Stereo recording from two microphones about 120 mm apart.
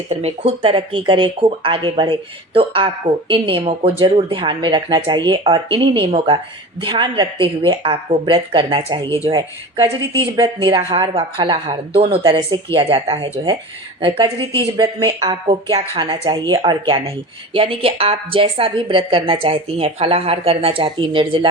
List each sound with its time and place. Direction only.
0.1 s a woman's voice: 55° right (ahead or behind)
10.4 s a woman's voice: 40° right (ahead or behind)